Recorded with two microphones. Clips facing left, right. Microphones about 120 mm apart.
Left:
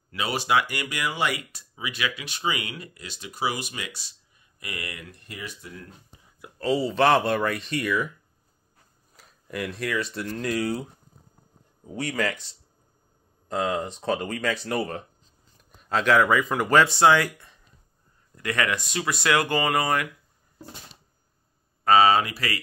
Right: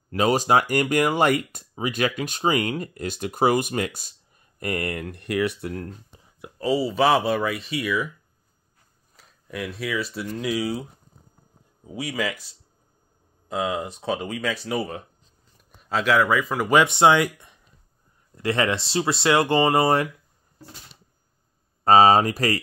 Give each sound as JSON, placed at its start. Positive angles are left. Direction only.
{"t": 0.1, "sound": "speech", "side_deg": -40}
{"t": 6.6, "sound": "speech", "side_deg": -10}
{"t": 9.1, "sound": "speech", "side_deg": 0}
{"t": 16.7, "sound": "speech", "side_deg": -20}
{"t": 21.8, "sound": "speech", "side_deg": -35}